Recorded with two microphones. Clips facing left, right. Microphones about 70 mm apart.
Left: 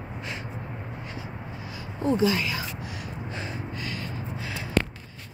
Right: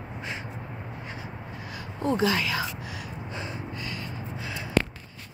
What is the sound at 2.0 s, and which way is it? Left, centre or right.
Speech, right.